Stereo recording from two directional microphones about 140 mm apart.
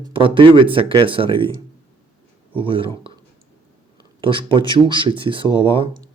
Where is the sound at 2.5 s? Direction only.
40° right (ahead or behind).